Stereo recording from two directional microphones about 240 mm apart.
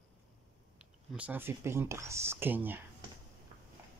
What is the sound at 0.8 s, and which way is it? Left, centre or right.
Speech, centre.